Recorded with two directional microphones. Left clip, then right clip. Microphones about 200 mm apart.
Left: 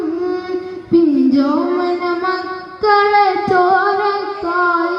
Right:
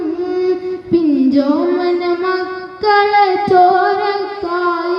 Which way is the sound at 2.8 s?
45° right (ahead or behind).